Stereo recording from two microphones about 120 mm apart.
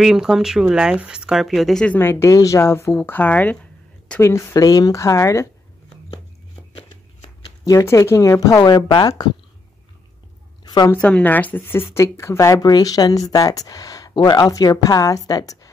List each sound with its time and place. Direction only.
0.0 s speech: 5° right (ahead or behind)
2.0 s speech: 20° left (ahead or behind)
7.6 s speech: 25° left (ahead or behind)
10.6 s a sound: 35° left (ahead or behind)
10.9 s speech: 10° left (ahead or behind); by 15.7 s 30° left (ahead or behind)